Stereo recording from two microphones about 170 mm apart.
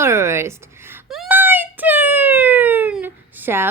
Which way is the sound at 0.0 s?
15° right (ahead or behind).